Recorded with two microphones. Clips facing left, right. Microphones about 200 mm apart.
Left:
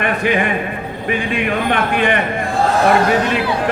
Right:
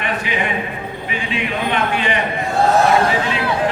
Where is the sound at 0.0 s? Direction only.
50° left (ahead or behind).